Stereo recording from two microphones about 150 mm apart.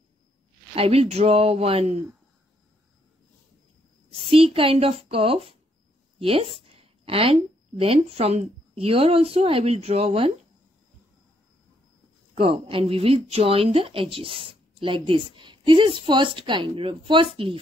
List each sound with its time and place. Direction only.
0.7 s speech: 40° right (ahead or behind)
4.1 s speech: 40° right (ahead or behind)
6.8 s a sound: 40° right (ahead or behind)
7.8 s speech: 40° right (ahead or behind)
12.4 s speech: 35° right (ahead or behind)